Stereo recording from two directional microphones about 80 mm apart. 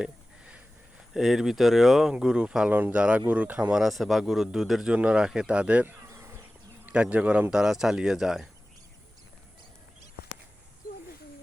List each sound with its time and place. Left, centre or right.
0.0 s sniff: centre
1.1 s speech: centre
6.1 s bee: right
6.8 s speech: centre